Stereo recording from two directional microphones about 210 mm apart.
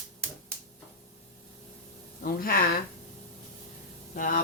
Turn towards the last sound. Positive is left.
turn(degrees=40)  # may be behind; listen again after turning